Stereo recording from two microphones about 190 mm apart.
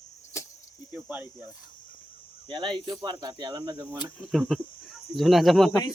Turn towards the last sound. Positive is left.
turn(degrees=0)  # may be behind; listen again after turning